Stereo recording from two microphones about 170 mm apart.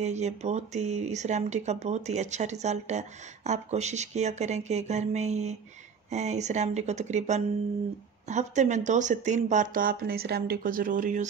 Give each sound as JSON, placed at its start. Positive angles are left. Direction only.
{"t": 0.0, "sound": "speech", "side_deg": -40}